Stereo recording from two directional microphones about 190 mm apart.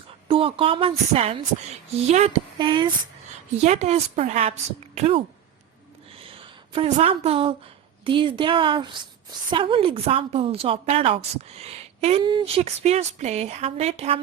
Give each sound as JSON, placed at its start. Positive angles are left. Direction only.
{"t": 0.3, "sound": "a woman's voice", "side_deg": -30}
{"t": 2.6, "sound": "a woman's voice", "side_deg": -25}
{"t": 3.6, "sound": "a woman's voice", "side_deg": -35}
{"t": 6.2, "sound": "a sound", "side_deg": -30}
{"t": 8.0, "sound": "a woman's voice", "side_deg": -25}